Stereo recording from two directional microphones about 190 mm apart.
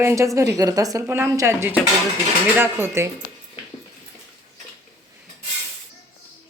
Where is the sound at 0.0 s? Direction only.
15° right (ahead or behind).